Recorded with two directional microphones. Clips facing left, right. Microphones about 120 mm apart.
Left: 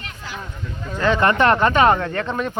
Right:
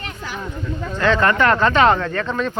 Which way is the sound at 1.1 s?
20° left (ahead or behind).